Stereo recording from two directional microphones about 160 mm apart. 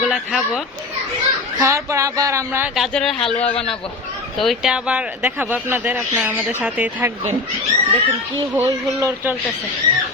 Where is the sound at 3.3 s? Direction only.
40° left (ahead or behind).